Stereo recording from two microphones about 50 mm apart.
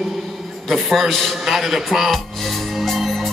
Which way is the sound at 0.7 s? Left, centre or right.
Centre.